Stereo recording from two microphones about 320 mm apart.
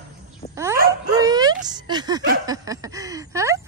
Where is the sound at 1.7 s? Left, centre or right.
Centre.